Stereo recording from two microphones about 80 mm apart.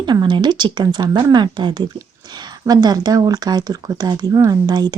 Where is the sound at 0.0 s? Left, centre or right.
Right.